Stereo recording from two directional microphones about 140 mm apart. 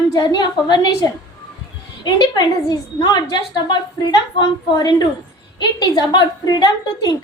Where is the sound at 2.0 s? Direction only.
30° left (ahead or behind).